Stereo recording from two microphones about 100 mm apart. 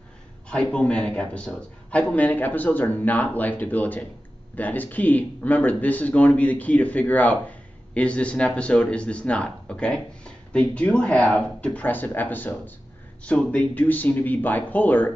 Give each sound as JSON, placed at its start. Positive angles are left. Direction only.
{"t": 0.5, "sound": "speech", "side_deg": 10}